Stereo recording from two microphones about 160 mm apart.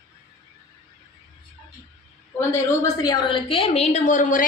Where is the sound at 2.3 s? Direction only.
15° left (ahead or behind).